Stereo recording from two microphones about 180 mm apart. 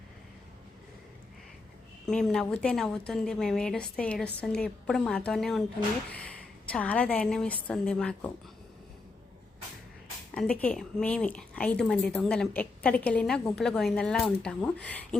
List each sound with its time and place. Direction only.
2.0 s a woman's voice: 5° left (ahead or behind)
6.7 s a woman's voice: 5° left (ahead or behind)
10.3 s a woman's voice: 5° left (ahead or behind)